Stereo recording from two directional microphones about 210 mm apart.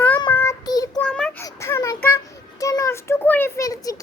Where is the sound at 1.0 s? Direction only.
5° left (ahead or behind).